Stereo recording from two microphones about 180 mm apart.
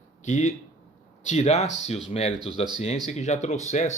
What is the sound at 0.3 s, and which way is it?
Speech, 40° left (ahead or behind).